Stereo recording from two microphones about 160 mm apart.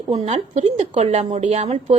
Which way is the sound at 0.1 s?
40° right (ahead or behind).